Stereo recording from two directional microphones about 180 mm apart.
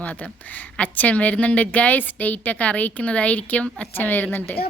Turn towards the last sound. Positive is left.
turn(degrees=10)  # may be behind; listen again after turning